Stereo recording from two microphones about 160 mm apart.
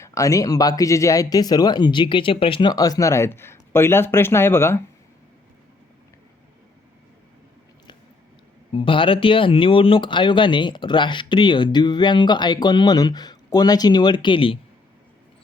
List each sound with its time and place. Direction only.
0.0 s speech: 20° left (ahead or behind)
8.7 s speech: 30° left (ahead or behind)